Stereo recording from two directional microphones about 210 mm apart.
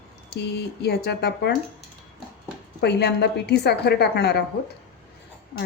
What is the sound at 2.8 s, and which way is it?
A woman's voice, 50° left (ahead or behind).